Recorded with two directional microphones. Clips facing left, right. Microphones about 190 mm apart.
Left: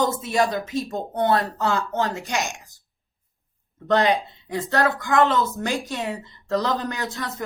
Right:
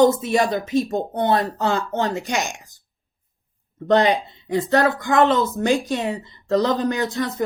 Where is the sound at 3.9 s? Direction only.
20° right (ahead or behind).